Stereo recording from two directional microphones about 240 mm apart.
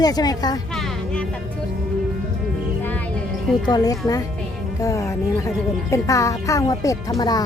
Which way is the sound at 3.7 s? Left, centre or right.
Centre.